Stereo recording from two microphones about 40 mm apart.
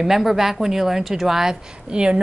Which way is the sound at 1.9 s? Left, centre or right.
Right.